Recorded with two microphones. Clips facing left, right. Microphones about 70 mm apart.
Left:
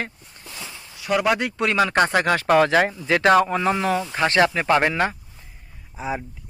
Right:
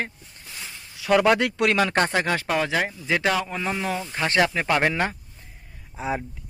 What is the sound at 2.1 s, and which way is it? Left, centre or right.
Speech, left.